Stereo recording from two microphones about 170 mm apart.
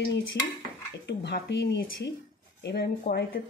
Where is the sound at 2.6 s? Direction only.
75° left (ahead or behind).